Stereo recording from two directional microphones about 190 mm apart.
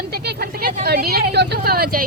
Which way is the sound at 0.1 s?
55° right (ahead or behind).